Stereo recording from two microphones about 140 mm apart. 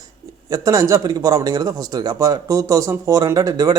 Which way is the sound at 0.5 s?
25° right (ahead or behind).